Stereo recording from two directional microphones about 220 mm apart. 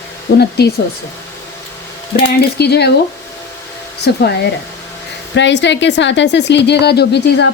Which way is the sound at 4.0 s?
50° left (ahead or behind).